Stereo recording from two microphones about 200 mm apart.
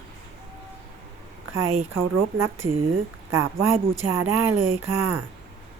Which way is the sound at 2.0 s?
75° right (ahead or behind).